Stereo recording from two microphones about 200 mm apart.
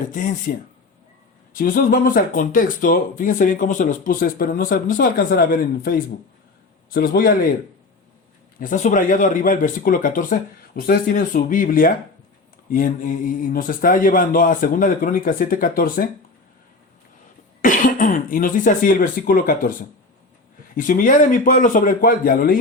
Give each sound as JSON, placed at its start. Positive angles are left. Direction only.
{"t": 0.0, "sound": "speech", "side_deg": 40}
{"t": 1.5, "sound": "speech", "side_deg": 45}
{"t": 8.5, "sound": "speech", "side_deg": 40}
{"t": 17.6, "sound": "speech", "side_deg": 40}